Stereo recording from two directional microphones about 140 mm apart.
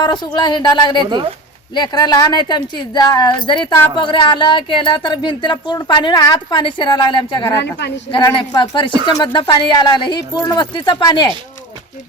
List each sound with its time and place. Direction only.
0.0 s speech: 30° left (ahead or behind)